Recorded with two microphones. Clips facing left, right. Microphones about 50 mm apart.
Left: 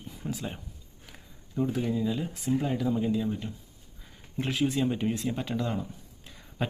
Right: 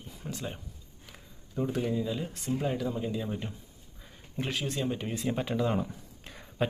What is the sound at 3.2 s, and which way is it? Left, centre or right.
Speech, centre.